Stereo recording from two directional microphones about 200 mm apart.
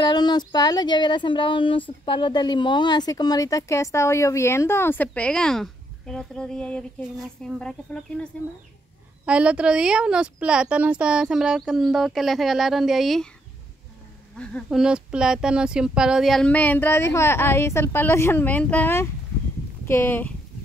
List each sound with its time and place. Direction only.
0.0 s a woman's voice: 20° left (ahead or behind); by 13.3 s centre (ahead or behind)
14.4 s speech: centre (ahead or behind)